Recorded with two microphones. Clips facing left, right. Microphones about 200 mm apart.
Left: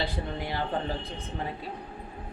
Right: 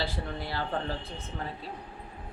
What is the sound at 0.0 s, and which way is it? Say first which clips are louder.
Speech: left 2 dB; 15° left (ahead or behind).